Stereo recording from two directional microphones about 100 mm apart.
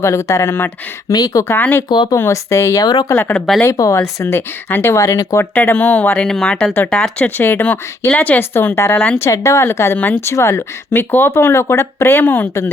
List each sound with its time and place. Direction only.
0.0 s speech: 30° left (ahead or behind)
1.1 s speech: 40° left (ahead or behind)
1.5 s speech: 20° left (ahead or behind)
1.9 s speech: 45° left (ahead or behind)
2.1 s speech: 30° left (ahead or behind)
2.8 s speech: 45° left (ahead or behind)
3.1 s speech: 20° left (ahead or behind)
3.3 s speech: 5° left (ahead or behind)
3.6 s speech: 30° left (ahead or behind)
5.4 s speech: 20° left (ahead or behind)
6.2 s speech: 5° left (ahead or behind)